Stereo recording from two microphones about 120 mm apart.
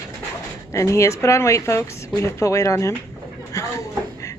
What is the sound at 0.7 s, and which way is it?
Speech, 25° left (ahead or behind).